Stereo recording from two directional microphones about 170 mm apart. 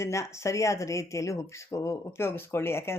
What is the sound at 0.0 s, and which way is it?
Speech, 15° left (ahead or behind).